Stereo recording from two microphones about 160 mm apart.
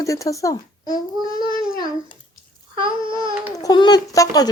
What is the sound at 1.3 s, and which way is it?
Child singing, 30° right (ahead or behind).